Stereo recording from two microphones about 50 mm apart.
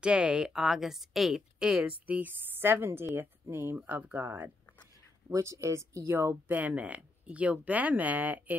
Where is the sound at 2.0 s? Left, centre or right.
Right.